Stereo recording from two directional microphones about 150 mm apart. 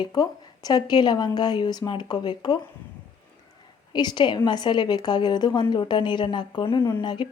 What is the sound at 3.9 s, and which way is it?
A woman's voice, 30° left (ahead or behind).